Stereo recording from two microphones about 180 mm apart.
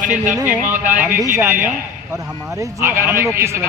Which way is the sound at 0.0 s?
45° right (ahead or behind).